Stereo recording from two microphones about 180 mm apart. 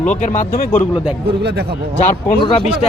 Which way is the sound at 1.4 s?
65° right (ahead or behind).